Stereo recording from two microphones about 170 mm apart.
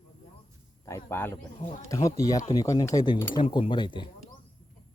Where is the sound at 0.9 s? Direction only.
15° left (ahead or behind).